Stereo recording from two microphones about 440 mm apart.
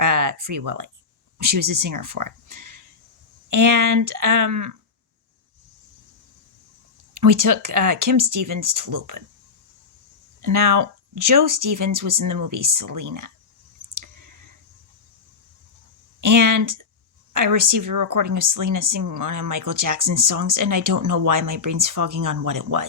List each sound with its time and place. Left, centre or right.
0.0 s a sound: right
1.4 s a woman's voice: right
7.1 s a woman's voice: right
10.4 s a woman's voice: right
14.0 s clicking: right
16.2 s a woman's voice: right